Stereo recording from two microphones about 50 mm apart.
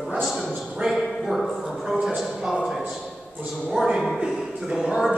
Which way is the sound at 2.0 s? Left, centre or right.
Centre.